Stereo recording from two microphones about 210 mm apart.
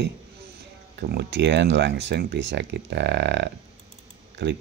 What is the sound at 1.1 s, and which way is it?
Speech, 55° right (ahead or behind).